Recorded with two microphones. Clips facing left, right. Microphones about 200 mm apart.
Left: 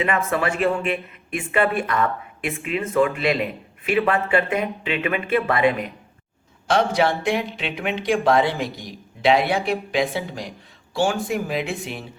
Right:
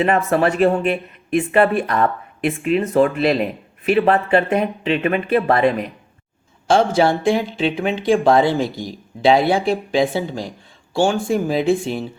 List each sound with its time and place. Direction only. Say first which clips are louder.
0.3 s a woman's voice: right 6 dB; 35° right (ahead or behind)